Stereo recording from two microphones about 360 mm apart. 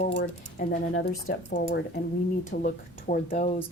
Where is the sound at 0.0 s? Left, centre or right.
Left.